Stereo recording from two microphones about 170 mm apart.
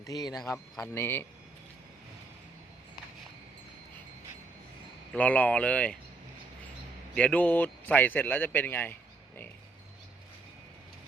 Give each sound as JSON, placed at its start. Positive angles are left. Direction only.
{"t": 0.0, "sound": "a man's voice", "side_deg": 20}
{"t": 5.1, "sound": "a man's voice", "side_deg": 10}
{"t": 7.2, "sound": "a man's voice", "side_deg": 10}